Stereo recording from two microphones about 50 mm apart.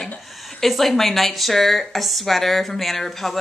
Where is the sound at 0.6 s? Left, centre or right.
Centre.